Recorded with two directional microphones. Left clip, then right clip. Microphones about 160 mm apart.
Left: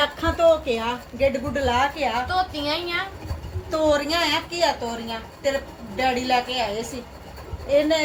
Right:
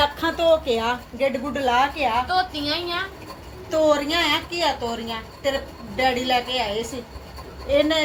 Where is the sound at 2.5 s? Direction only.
15° left (ahead or behind).